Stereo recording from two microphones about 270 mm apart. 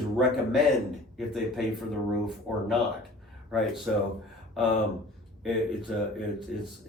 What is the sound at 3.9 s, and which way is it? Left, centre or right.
Speech, centre.